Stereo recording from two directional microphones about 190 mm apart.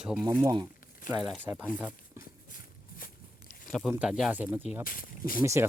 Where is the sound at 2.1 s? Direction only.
50° left (ahead or behind).